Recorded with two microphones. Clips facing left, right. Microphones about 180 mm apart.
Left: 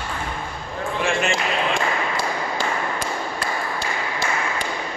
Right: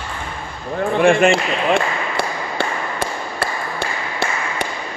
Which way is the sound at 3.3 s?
65° right (ahead or behind).